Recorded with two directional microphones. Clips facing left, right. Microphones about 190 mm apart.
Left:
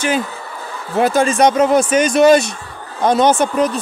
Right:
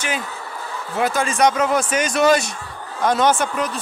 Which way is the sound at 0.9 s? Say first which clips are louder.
Left 7 dB; 30° left (ahead or behind).